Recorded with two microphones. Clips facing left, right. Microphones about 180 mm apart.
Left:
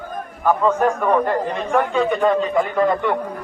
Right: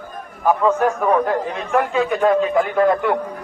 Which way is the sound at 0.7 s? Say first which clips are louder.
Even; 5° right (ahead or behind).